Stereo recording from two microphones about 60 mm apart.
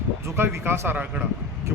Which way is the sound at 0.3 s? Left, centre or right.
Right.